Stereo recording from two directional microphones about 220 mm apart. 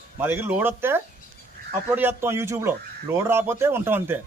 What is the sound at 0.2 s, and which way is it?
A man's voice, 10° right (ahead or behind).